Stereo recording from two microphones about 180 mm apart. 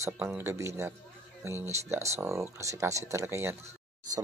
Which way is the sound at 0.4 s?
15° right (ahead or behind).